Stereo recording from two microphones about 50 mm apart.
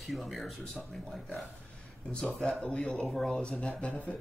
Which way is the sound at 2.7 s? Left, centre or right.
Left.